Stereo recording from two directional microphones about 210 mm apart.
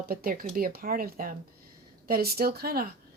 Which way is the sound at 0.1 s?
45° right (ahead or behind).